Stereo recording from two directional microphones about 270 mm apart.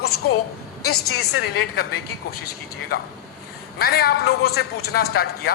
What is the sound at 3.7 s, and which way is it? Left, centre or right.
A woman's voice, left.